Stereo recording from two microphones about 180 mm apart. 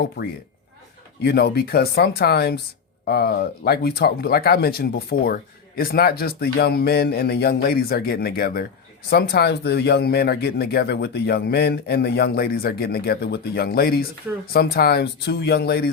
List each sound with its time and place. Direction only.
1.2 s speech: 65° left (ahead or behind)